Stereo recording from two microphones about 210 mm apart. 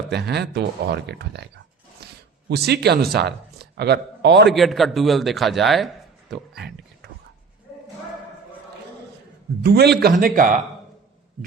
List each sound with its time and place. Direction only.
0.1 s speech: 55° right (ahead or behind)
2.0 s a sound: 50° right (ahead or behind)
2.5 s a man's voice: 50° right (ahead or behind)
4.4 s a man's voice: centre (ahead or behind)
6.3 s a sound: 50° right (ahead or behind)
9.6 s a man's voice: 50° right (ahead or behind)